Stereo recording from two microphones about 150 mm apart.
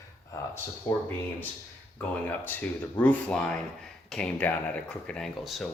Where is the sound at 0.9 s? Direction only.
15° left (ahead or behind).